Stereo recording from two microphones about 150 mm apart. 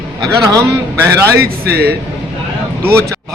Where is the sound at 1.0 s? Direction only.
15° right (ahead or behind).